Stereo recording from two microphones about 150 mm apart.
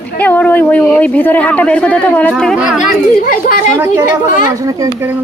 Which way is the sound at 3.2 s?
60° left (ahead or behind).